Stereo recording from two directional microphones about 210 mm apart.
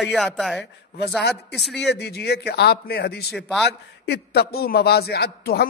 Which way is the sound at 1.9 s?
50° left (ahead or behind).